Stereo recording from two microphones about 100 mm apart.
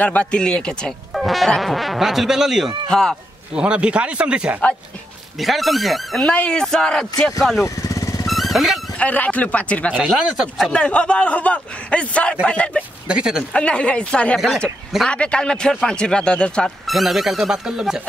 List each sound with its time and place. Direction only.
0.0 s speech: 15° left (ahead or behind); by 2.7 s 5° right (ahead or behind)
2.9 s a man's voice: 5° left (ahead or behind)
3.5 s speech: 10° right (ahead or behind)
5.4 s speech: centre (ahead or behind)
6.2 s a man's voice: 10° left (ahead or behind)
7.6 s vehicle: 35° left (ahead or behind)
8.3 s vehicle: centre (ahead or behind)
8.9 s a man's voice: 15° left (ahead or behind)
9.9 s speech: 5° right (ahead or behind)
10.7 s a man's voice: 10° left (ahead or behind)
13.1 s speech: 10° right (ahead or behind)
13.5 s a man's voice: 10° left (ahead or behind); by 18.0 s 5° right (ahead or behind)